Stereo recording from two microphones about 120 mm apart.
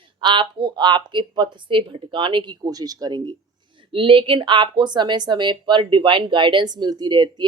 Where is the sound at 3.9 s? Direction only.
45° right (ahead or behind).